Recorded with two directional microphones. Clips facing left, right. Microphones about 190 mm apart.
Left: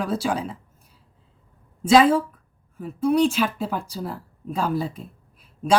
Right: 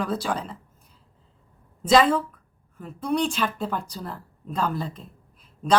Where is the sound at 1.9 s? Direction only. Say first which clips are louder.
Left 3 dB; 10° left (ahead or behind).